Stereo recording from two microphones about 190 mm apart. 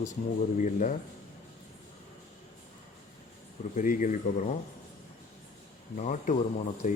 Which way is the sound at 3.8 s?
45° left (ahead or behind).